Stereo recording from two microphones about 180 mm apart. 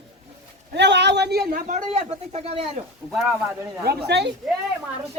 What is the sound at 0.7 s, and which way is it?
Speech, 75° right (ahead or behind).